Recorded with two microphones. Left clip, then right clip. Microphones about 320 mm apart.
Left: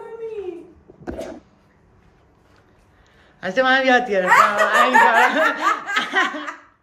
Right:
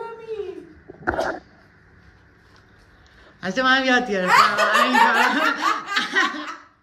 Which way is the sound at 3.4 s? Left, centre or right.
Centre.